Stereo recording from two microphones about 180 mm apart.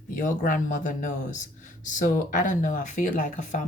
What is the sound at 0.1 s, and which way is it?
Speech, 45° left (ahead or behind).